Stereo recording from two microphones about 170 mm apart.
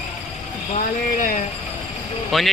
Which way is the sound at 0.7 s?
50° left (ahead or behind).